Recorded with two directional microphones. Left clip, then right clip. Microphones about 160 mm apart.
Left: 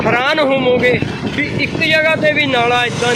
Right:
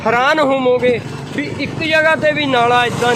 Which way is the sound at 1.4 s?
25° right (ahead or behind).